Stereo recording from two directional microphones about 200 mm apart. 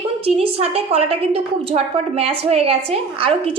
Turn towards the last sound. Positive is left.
turn(degrees=-30)  # may be behind; listen again after turning